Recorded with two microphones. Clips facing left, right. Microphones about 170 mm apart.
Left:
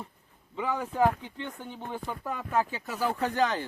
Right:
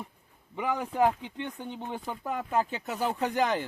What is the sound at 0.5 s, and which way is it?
Speech, 15° right (ahead or behind).